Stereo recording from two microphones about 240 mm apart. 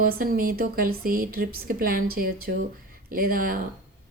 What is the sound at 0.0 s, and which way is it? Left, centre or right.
Speech, right.